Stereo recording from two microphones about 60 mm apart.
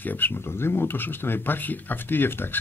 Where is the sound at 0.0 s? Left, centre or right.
Left.